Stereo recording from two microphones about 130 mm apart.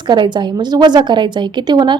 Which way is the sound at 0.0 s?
35° right (ahead or behind).